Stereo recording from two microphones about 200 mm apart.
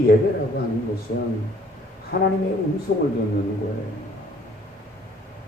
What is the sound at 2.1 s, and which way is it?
Speech, 50° left (ahead or behind).